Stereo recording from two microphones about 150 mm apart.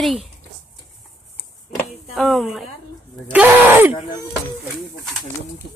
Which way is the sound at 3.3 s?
10° right (ahead or behind).